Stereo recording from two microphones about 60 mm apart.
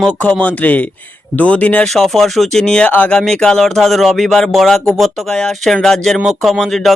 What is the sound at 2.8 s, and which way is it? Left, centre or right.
Speech, left.